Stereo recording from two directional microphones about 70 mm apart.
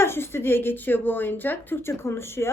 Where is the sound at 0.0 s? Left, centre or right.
Left.